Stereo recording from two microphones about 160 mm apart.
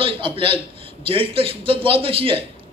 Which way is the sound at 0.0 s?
30° right (ahead or behind).